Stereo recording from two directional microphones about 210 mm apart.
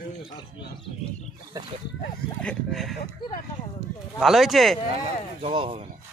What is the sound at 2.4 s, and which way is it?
Speech, 5° left (ahead or behind).